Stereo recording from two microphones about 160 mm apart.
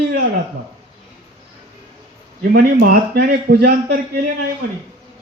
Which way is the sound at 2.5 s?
70° right (ahead or behind).